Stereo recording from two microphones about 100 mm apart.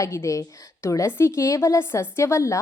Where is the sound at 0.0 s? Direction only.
30° left (ahead or behind).